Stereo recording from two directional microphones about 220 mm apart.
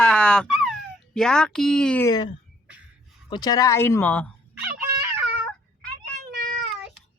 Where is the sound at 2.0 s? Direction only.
15° left (ahead or behind).